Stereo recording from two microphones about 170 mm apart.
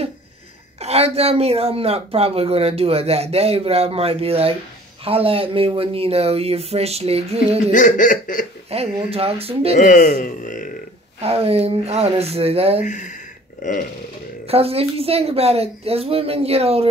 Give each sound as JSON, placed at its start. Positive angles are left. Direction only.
{"t": 0.7, "sound": "speech", "side_deg": -40}
{"t": 7.7, "sound": "speech", "side_deg": 50}
{"t": 8.6, "sound": "speech", "side_deg": -35}
{"t": 9.8, "sound": "speech", "side_deg": 45}
{"t": 11.1, "sound": "speech", "side_deg": -35}
{"t": 12.8, "sound": "speech", "side_deg": 50}
{"t": 14.5, "sound": "speech", "side_deg": -35}